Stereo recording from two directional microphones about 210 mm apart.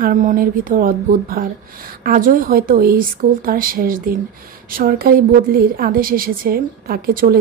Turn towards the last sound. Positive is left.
turn(degrees=-45)  # may be behind; listen again after turning